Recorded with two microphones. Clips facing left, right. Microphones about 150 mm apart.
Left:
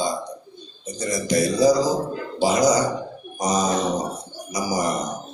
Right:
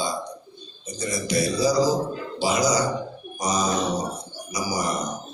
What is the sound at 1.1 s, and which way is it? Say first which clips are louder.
A man's voice: left 3 dB; 45° left (ahead or behind).